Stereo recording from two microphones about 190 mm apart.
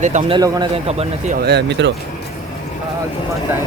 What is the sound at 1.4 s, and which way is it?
Speech, 60° right (ahead or behind).